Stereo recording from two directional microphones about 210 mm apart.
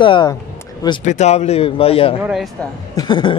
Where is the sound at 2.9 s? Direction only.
20° left (ahead or behind).